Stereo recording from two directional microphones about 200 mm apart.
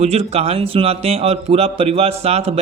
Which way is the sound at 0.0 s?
30° right (ahead or behind).